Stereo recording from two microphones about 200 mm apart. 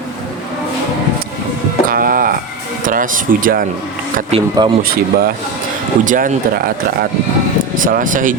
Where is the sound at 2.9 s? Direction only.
40° right (ahead or behind).